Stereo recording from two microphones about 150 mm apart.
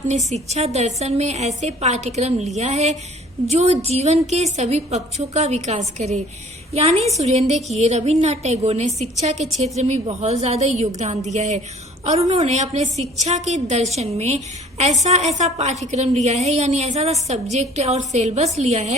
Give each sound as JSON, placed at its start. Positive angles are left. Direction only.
{"t": 0.1, "sound": "a woman's voice", "side_deg": -45}